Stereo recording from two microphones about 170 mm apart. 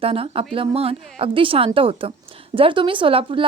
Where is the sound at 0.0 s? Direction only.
35° right (ahead or behind).